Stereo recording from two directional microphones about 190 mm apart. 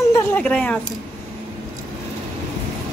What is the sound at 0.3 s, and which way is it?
Speech, 5° left (ahead or behind).